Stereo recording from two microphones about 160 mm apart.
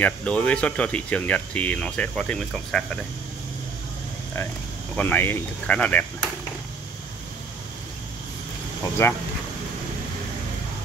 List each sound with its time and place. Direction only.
0.0 s speech: 10° left (ahead or behind)
4.9 s speech: 10° left (ahead or behind)
9.0 s speech: 15° left (ahead or behind)